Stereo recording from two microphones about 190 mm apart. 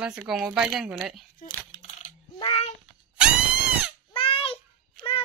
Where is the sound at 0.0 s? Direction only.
5° right (ahead or behind).